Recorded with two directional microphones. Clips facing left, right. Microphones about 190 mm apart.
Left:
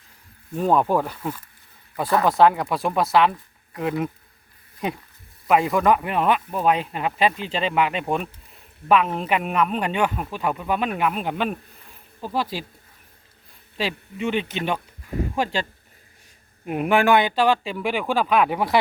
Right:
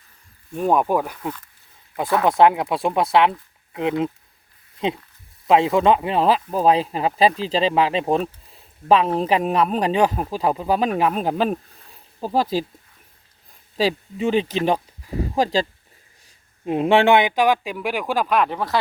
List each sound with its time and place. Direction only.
0.5 s speech: 10° right (ahead or behind)
2.4 s speech: 20° right (ahead or behind); by 12.6 s 40° right (ahead or behind)
13.7 s speech: 35° right (ahead or behind)
16.6 s speech: 25° right (ahead or behind); by 18.3 s 10° right (ahead or behind)
18.3 s speech: 5° left (ahead or behind)